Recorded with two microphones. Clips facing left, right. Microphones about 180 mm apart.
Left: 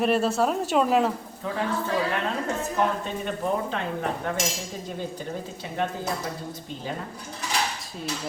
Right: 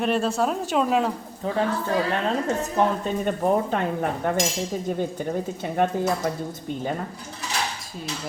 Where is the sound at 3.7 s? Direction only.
45° right (ahead or behind).